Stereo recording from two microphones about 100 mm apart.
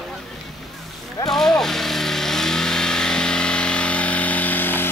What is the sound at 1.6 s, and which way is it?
Vehicle, 5° left (ahead or behind).